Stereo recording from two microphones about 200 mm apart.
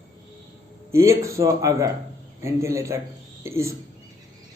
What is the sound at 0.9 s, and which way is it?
Speech, 15° right (ahead or behind).